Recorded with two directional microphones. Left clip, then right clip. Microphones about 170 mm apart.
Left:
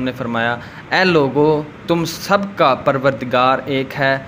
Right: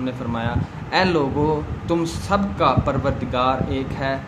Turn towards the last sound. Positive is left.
turn(degrees=40)  # may be behind; listen again after turning